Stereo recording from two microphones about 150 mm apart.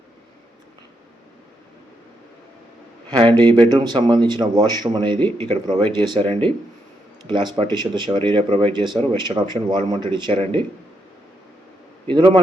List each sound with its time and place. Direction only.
3.1 s speech: 35° right (ahead or behind)
12.0 s speech: 30° right (ahead or behind)